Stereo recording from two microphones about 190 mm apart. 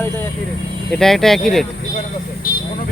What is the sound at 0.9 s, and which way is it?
Speech, centre (ahead or behind).